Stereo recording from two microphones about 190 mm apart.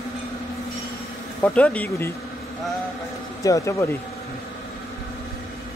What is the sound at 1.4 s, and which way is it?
Speech, 5° left (ahead or behind).